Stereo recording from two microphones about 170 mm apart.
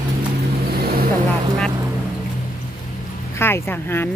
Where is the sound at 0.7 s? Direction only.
65° right (ahead or behind).